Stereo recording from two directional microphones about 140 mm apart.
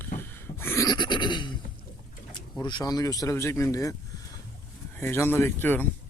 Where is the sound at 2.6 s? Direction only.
30° left (ahead or behind).